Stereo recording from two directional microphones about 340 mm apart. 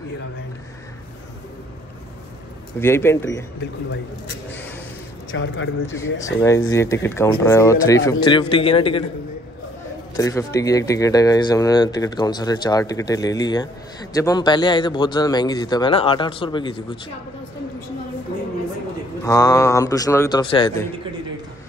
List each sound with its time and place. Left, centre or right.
2.8 s speech: centre
5.3 s a man's voice: left
6.4 s speech: centre
10.1 s speech: centre
19.2 s speech: centre